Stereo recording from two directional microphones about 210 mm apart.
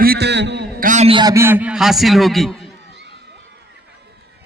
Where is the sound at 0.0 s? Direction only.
50° right (ahead or behind).